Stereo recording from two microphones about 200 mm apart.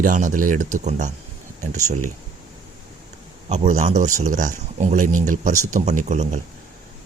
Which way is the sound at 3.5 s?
35° right (ahead or behind).